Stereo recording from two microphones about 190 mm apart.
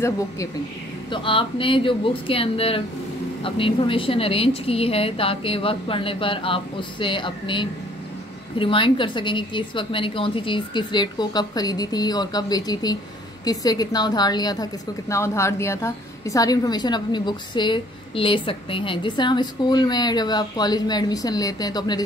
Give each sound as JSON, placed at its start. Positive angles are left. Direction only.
{"t": 1.1, "sound": "a woman's voice", "side_deg": 25}